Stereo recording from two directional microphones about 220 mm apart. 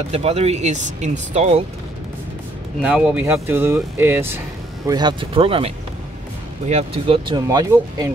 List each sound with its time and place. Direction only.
0.1 s speech: 30° right (ahead or behind)
2.8 s speech: 5° right (ahead or behind); by 5.7 s 25° right (ahead or behind)
6.7 s speech: 25° right (ahead or behind)
7.4 s speech: 15° right (ahead or behind)